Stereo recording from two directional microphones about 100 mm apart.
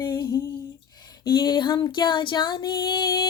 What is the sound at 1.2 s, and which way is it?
Child singing, 45° left (ahead or behind).